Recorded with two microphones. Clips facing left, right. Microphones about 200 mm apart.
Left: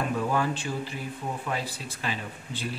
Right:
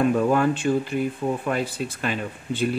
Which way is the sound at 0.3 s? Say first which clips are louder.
Right 8 dB; 55° right (ahead or behind).